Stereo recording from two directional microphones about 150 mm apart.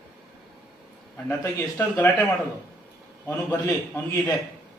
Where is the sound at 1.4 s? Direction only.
10° left (ahead or behind).